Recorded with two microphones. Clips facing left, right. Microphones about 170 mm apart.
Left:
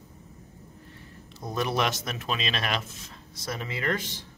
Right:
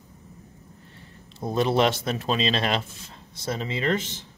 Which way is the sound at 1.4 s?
25° right (ahead or behind).